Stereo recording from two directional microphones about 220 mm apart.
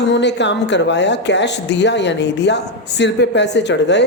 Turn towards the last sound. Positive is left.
turn(degrees=50)  # may be behind; listen again after turning